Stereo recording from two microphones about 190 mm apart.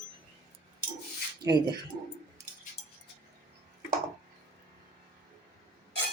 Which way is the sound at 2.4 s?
15° right (ahead or behind).